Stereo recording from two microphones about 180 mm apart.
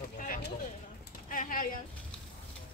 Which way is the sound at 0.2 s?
50° left (ahead or behind).